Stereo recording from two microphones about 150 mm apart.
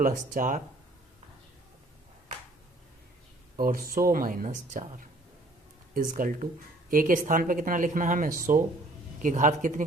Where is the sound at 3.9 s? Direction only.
70° right (ahead or behind); by 5.0 s 55° right (ahead or behind).